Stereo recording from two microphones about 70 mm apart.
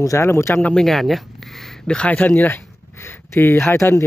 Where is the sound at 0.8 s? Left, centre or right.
Centre.